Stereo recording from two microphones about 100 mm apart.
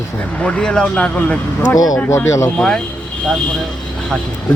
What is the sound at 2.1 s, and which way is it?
Speech, 30° left (ahead or behind).